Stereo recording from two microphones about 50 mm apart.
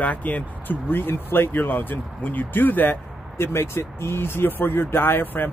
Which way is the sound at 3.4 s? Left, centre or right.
Left.